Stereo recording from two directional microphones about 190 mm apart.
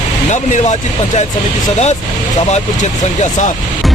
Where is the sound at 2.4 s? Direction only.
35° left (ahead or behind).